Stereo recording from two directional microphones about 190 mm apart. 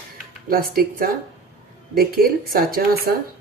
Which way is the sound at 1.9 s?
50° right (ahead or behind).